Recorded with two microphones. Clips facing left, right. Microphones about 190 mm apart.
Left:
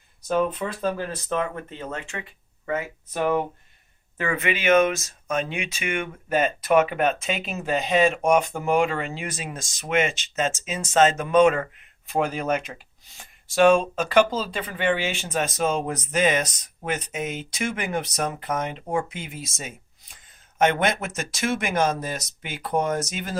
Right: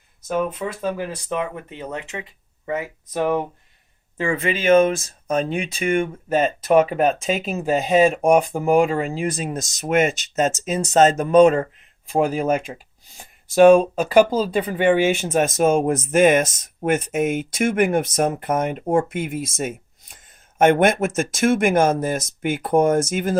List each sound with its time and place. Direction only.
0.3 s speech: 10° right (ahead or behind)
4.2 s speech: 30° right (ahead or behind)
14.2 s speech: 15° right (ahead or behind)
14.6 s speech: 45° right (ahead or behind)